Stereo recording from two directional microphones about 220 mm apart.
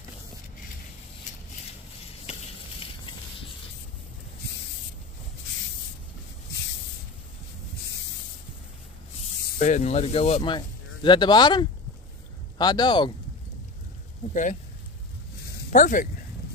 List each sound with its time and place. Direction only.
9.6 s speech: 30° left (ahead or behind)
14.3 s speech: 35° left (ahead or behind)
15.7 s speech: 35° left (ahead or behind)